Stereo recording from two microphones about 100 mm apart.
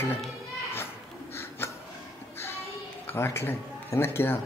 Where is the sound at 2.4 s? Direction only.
25° left (ahead or behind).